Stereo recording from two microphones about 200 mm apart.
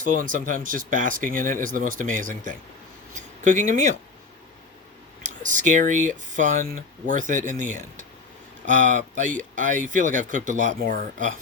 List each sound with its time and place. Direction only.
0.0 s speech: 40° right (ahead or behind)
3.2 s a sound: 40° right (ahead or behind)
3.7 s speech: 35° right (ahead or behind)
5.2 s speech: 40° right (ahead or behind)